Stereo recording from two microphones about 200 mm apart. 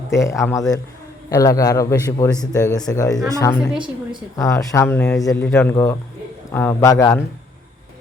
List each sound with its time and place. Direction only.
0.1 s speech: 15° left (ahead or behind)